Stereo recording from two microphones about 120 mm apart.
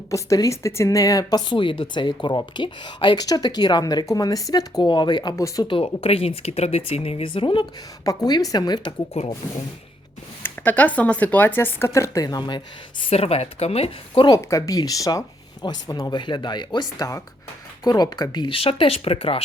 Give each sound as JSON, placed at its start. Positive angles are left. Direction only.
{"t": 0.1, "sound": "speech", "side_deg": 25}
{"t": 5.6, "sound": "speech", "side_deg": 50}
{"t": 8.0, "sound": "speech", "side_deg": 30}
{"t": 9.2, "sound": "speech", "side_deg": 65}
{"t": 10.4, "sound": "speech", "side_deg": 15}
{"t": 14.3, "sound": "speech", "side_deg": 30}